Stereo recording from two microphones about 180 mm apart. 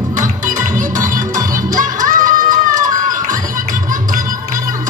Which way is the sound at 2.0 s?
50° right (ahead or behind).